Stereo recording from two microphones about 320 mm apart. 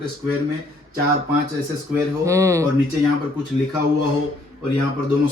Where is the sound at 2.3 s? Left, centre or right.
Centre.